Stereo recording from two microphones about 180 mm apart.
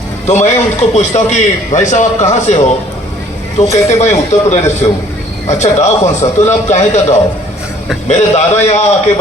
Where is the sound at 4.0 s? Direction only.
40° left (ahead or behind).